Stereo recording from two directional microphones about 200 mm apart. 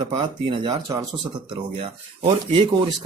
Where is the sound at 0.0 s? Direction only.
25° right (ahead or behind).